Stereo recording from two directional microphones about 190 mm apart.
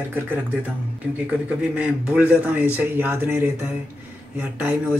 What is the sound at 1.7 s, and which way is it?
A man's voice, 5° right (ahead or behind).